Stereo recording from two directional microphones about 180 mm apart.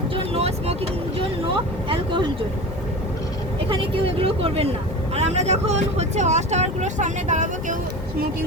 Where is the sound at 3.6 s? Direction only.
30° right (ahead or behind).